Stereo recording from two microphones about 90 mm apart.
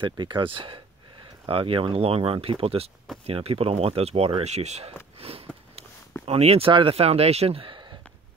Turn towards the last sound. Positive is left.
turn(degrees=-60)  # may be behind; listen again after turning